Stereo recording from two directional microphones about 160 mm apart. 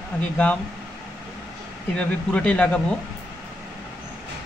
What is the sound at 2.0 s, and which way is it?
Speech, 5° left (ahead or behind).